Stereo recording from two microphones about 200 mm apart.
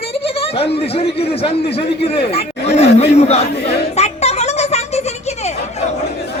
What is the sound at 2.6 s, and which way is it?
Chatter, 30° left (ahead or behind).